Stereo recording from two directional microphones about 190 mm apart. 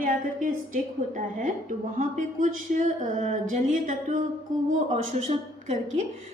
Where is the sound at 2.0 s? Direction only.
45° right (ahead or behind).